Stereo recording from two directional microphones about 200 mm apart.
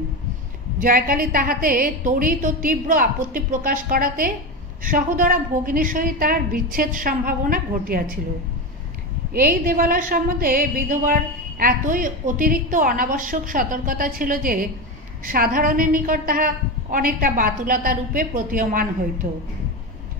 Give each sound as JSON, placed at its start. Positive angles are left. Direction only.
{"t": 0.7, "sound": "a woman's voice", "side_deg": -45}
{"t": 9.3, "sound": "a woman's voice", "side_deg": -45}